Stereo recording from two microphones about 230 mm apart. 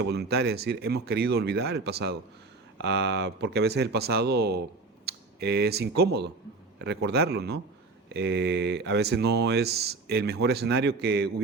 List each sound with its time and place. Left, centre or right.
0.0 s speech: right
5.0 s computer keyboard: right
6.0 s speech: right